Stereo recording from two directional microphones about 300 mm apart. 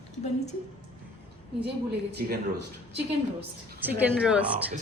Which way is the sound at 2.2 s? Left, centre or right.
Right.